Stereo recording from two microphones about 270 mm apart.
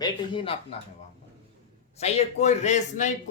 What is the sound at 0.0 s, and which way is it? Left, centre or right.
Speech, centre.